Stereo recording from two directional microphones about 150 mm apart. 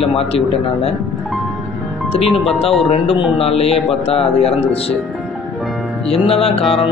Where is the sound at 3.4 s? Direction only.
40° left (ahead or behind).